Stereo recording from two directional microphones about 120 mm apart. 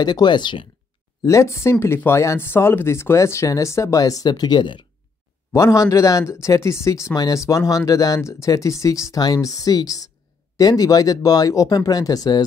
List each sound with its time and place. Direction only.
0.0 s speech: 35° left (ahead or behind)
1.2 s speech: 25° left (ahead or behind); by 4.8 s 40° left (ahead or behind)
5.5 s speech: 25° left (ahead or behind)